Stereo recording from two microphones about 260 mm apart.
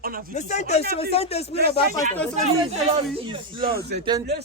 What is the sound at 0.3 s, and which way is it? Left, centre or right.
Speech, left.